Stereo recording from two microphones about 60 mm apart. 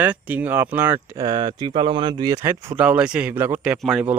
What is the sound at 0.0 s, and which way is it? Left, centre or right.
Speech, right.